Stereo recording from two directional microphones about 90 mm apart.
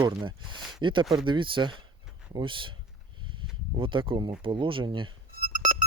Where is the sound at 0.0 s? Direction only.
65° right (ahead or behind).